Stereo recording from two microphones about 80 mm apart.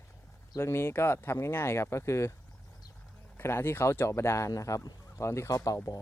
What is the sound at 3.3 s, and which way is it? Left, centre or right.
A man's voice, left.